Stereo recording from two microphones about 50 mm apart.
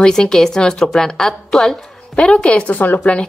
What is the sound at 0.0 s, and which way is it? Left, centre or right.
A woman's voice, centre.